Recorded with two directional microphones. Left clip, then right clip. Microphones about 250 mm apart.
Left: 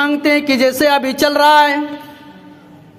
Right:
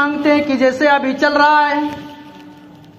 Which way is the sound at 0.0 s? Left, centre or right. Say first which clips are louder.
Even; left.